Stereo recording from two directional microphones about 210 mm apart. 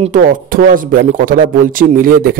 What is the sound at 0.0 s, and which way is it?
Speech, 40° right (ahead or behind).